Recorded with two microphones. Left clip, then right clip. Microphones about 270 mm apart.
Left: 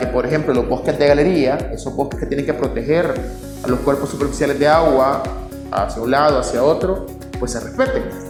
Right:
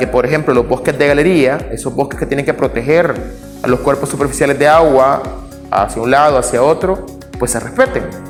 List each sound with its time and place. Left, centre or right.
0.0 s a man's voice: right